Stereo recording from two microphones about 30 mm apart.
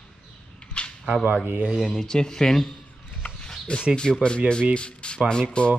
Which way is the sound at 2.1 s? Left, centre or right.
Left.